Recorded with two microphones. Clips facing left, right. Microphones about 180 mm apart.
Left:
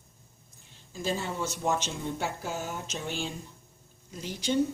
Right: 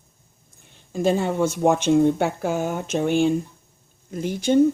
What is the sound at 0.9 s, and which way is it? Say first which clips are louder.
Speech: right 11 dB; 55° right (ahead or behind).